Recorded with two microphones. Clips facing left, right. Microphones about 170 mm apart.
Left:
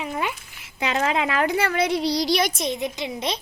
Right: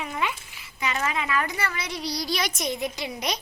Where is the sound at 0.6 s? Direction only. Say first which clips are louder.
Left 5 dB; 70° left (ahead or behind).